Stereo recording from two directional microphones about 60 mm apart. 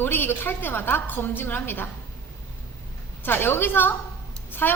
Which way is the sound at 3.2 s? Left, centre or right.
Left.